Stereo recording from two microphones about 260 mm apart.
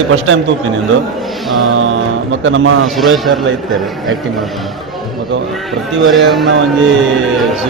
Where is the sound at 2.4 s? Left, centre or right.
Right.